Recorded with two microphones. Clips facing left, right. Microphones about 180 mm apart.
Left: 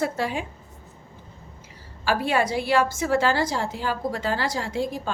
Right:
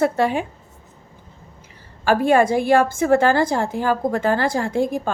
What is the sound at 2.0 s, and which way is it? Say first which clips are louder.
A woman's voice: right 7 dB; 50° right (ahead or behind).